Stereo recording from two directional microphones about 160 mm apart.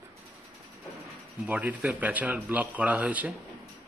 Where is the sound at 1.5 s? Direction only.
10° right (ahead or behind).